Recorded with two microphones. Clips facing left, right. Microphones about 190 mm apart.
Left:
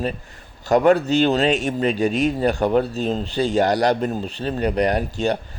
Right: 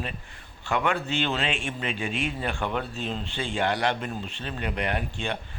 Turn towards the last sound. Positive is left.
turn(degrees=40)  # may be behind; listen again after turning